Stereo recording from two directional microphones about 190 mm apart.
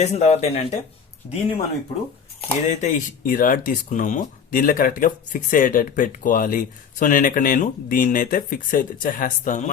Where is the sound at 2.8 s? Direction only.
40° left (ahead or behind).